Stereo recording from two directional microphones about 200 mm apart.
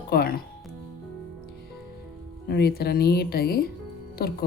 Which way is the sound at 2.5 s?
50° left (ahead or behind).